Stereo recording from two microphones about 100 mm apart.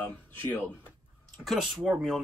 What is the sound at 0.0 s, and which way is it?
Speech, 15° left (ahead or behind).